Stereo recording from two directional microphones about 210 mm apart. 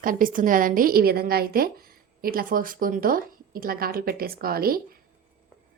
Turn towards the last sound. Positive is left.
turn(degrees=-45)  # may be behind; listen again after turning